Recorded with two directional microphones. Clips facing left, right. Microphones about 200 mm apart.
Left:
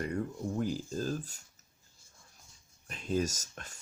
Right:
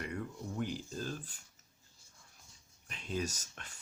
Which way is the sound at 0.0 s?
40° left (ahead or behind).